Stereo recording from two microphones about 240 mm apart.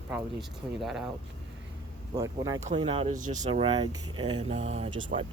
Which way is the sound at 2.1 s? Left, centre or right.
Centre.